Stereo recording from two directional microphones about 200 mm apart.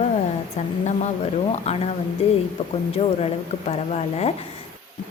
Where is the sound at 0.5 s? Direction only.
30° left (ahead or behind).